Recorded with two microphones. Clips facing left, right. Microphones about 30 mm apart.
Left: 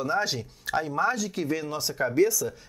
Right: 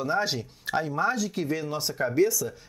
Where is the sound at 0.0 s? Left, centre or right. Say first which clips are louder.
Even; centre.